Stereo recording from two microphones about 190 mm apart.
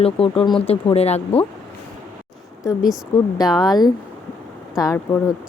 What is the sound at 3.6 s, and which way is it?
Speech, 20° left (ahead or behind).